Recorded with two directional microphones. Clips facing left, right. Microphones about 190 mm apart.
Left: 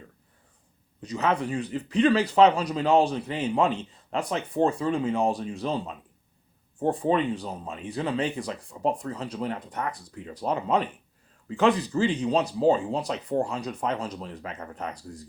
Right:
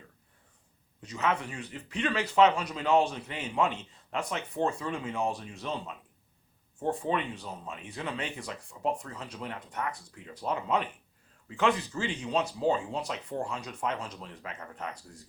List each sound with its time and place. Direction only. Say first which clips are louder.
1.0 s speech: left 5 dB; 35° left (ahead or behind)